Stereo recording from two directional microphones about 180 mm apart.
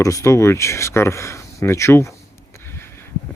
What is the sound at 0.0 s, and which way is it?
Speech, 15° left (ahead or behind).